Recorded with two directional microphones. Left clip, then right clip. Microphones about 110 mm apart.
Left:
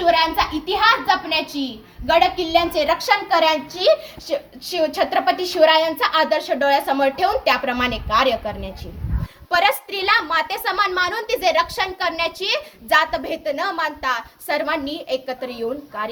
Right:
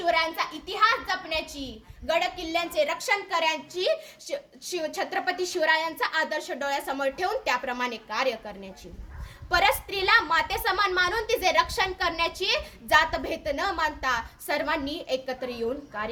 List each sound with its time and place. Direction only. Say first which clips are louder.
0.0 s a child's voice: left 8 dB; 35° right (ahead or behind)
9.5 s a child's voice: left 5 dB; 25° right (ahead or behind)